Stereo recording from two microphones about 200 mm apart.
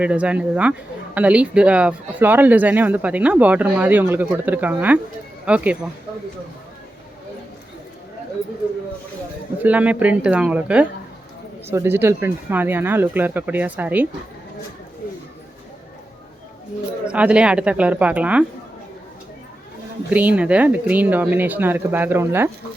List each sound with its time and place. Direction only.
0.0 s speech: 5° right (ahead or behind)
9.6 s speech: 5° right (ahead or behind)
17.1 s speech: 5° right (ahead or behind)
20.1 s speech: 5° right (ahead or behind)